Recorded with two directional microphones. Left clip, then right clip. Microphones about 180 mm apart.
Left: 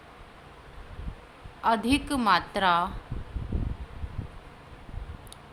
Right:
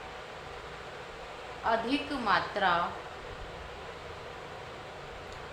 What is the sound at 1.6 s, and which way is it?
A woman's voice, 60° left (ahead or behind).